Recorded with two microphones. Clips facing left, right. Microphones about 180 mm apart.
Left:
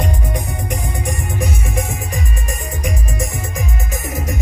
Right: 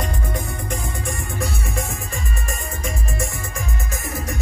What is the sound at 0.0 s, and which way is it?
Music, 20° left (ahead or behind).